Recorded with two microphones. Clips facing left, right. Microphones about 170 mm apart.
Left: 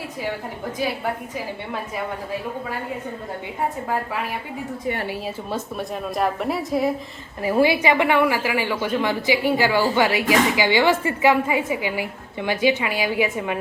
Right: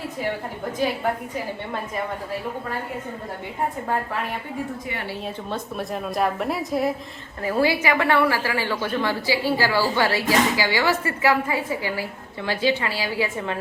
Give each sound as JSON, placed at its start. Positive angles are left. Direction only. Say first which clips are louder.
{"t": 5.2, "sound": "a woman's voice", "louder": "left 2 dB", "side_deg": 5}
{"t": 7.4, "sound": "a woman's voice", "louder": "left 3 dB", "side_deg": 15}